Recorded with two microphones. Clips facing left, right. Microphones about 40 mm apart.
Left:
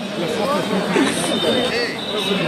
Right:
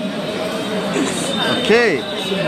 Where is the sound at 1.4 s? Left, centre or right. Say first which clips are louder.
Right 8 dB; right.